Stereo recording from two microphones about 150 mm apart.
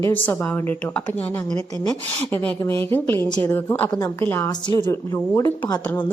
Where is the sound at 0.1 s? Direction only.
10° left (ahead or behind).